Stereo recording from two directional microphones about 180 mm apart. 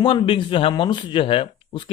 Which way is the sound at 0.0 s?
30° left (ahead or behind).